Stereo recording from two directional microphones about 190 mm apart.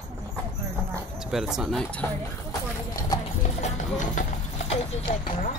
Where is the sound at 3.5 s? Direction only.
40° left (ahead or behind).